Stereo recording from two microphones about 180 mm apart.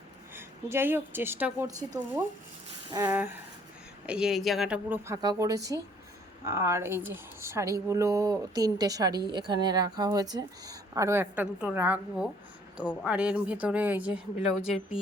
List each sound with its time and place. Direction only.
0.3 s speech: 10° right (ahead or behind)
4.0 s speech: 5° right (ahead or behind)